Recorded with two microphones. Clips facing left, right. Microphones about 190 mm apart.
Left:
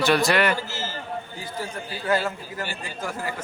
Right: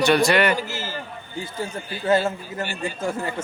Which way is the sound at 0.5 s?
15° right (ahead or behind).